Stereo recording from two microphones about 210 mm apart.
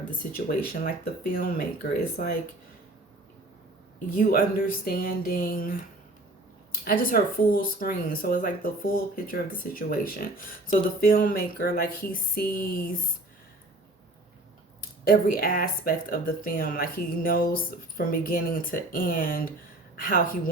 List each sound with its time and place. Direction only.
0.3 s speech: 40° left (ahead or behind)
4.1 s speech: 40° left (ahead or behind)
6.8 s speech: 40° left (ahead or behind)
15.0 s speech: 45° left (ahead or behind)